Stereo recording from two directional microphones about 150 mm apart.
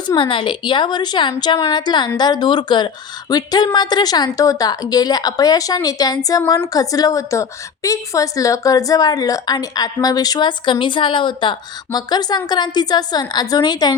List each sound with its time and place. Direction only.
0.2 s a woman's voice: 35° left (ahead or behind)